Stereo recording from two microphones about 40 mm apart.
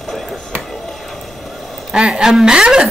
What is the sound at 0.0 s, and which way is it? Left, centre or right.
Chop, centre.